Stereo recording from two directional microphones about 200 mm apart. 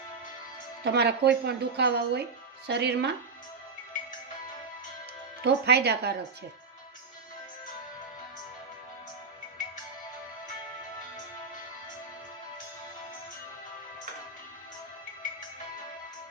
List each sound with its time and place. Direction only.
0.9 s a woman's voice: 55° right (ahead or behind)
5.4 s a woman's voice: 55° right (ahead or behind)